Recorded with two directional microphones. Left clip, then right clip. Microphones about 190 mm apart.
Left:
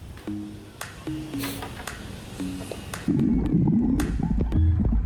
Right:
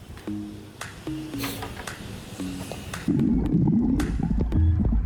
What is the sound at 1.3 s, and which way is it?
Music, centre (ahead or behind).